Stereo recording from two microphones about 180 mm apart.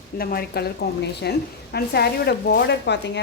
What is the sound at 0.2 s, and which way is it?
A woman's voice, 55° left (ahead or behind).